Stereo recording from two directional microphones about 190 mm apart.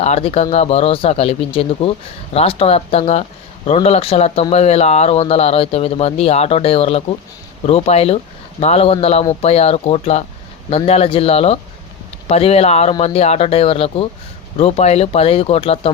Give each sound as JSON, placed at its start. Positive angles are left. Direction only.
{"t": 0.0, "sound": "speech", "side_deg": 30}